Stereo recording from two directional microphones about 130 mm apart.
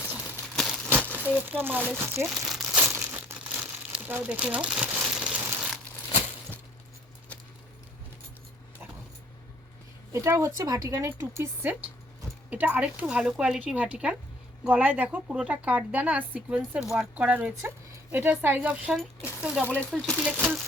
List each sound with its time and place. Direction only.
0.5 s a sound: 5° left (ahead or behind)
0.9 s crumpling: 15° right (ahead or behind)
2.0 s speech: 20° right (ahead or behind)
2.2 s crumpling: centre (ahead or behind)
2.8 s crumpling: 20° right (ahead or behind)
10.1 s a woman's voice: 25° right (ahead or behind); by 19.6 s centre (ahead or behind)
19.6 s speech: 15° left (ahead or behind)
19.9 s speech: centre (ahead or behind)